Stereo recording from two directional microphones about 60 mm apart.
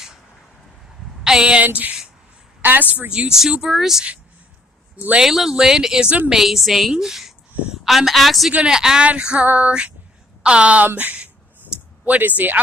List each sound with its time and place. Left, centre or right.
1.2 s speech: centre
1.6 s a sound: right
2.6 s a woman's voice: right
3.1 s speech: centre
5.2 s a woman's voice: centre
8.5 s speech: centre
9.5 s a sound: right
10.9 s speech: right
12.0 s a sound: right